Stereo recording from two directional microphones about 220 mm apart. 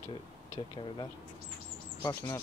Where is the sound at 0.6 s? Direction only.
20° left (ahead or behind).